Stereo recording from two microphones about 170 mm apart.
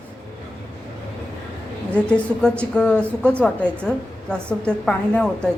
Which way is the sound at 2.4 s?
5° left (ahead or behind).